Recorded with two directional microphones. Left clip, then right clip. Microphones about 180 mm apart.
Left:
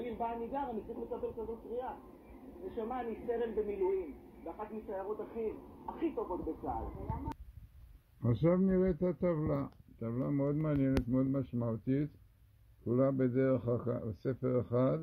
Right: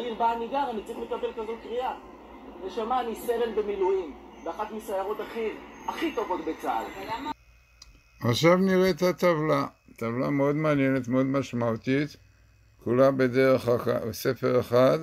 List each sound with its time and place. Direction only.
0.0 s speech: 10° right (ahead or behind); by 7.2 s 30° right (ahead or behind)
8.2 s speech: 15° right (ahead or behind)